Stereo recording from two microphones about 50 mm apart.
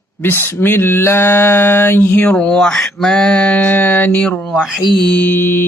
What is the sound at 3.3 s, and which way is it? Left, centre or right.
Speech, left.